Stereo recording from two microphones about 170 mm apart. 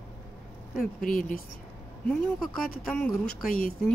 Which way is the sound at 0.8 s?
55° left (ahead or behind).